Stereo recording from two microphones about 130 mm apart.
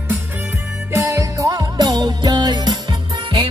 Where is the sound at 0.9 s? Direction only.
20° right (ahead or behind).